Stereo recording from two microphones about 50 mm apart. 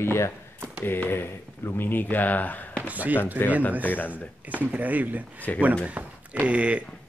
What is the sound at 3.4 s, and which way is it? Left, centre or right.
Speech, left.